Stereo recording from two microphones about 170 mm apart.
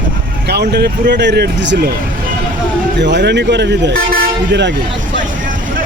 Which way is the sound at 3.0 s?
90° right.